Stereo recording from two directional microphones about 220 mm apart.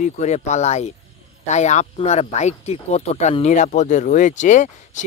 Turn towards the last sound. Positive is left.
turn(degrees=35)  # may be behind; listen again after turning